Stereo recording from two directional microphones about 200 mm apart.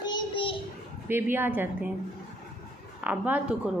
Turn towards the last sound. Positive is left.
turn(degrees=-5)  # may be behind; listen again after turning